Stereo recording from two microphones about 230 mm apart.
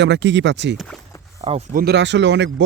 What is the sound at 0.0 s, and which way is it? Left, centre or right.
Speech, right.